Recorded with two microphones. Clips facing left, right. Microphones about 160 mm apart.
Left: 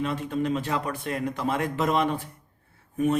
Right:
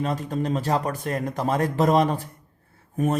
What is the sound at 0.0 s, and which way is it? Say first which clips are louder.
Speech: right 1 dB; 40° right (ahead or behind).